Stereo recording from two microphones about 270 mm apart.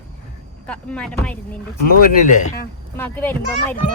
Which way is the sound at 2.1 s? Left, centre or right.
Left.